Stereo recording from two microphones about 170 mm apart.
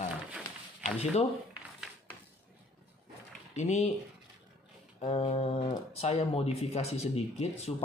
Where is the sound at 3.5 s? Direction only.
45° left (ahead or behind).